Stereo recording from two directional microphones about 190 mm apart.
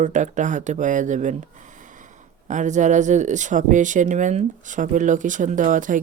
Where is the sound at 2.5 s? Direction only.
40° right (ahead or behind).